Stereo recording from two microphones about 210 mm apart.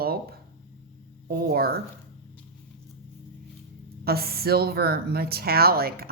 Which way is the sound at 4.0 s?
45° right (ahead or behind).